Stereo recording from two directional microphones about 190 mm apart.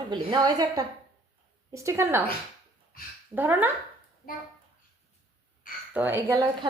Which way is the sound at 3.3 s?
10° right (ahead or behind).